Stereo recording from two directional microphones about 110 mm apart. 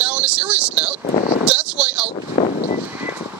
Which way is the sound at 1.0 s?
90° left.